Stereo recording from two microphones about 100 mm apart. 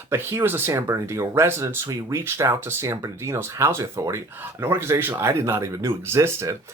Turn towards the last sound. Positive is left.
turn(degrees=-25)  # may be behind; listen again after turning